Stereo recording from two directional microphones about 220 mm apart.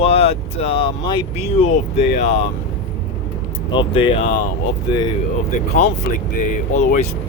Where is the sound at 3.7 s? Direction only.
20° left (ahead or behind).